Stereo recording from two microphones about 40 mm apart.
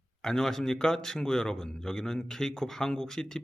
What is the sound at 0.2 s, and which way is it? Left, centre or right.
A man's voice, centre.